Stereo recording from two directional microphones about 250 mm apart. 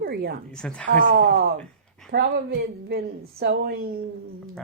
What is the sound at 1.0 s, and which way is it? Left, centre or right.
A woman's voice, right.